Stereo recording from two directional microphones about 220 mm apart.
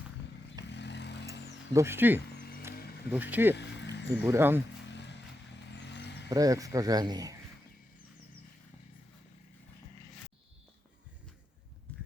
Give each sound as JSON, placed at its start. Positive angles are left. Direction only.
{"t": 0.7, "sound": "vehicle", "side_deg": 50}
{"t": 1.7, "sound": "speech", "side_deg": -10}
{"t": 2.3, "sound": "a sound", "side_deg": 45}
{"t": 3.1, "sound": "speech", "side_deg": -5}
{"t": 3.5, "sound": "music", "side_deg": 50}
{"t": 4.2, "sound": "speech", "side_deg": -10}
{"t": 4.9, "sound": "a sound", "side_deg": 50}
{"t": 5.7, "sound": "vehicle", "side_deg": 50}
{"t": 6.3, "sound": "speech", "side_deg": -15}